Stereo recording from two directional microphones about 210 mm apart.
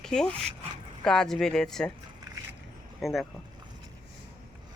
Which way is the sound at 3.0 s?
Centre (ahead or behind).